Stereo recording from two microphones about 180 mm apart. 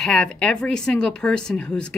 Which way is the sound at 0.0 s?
5° left (ahead or behind).